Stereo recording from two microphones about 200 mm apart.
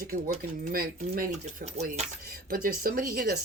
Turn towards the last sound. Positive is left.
turn(degrees=-45)  # may be behind; listen again after turning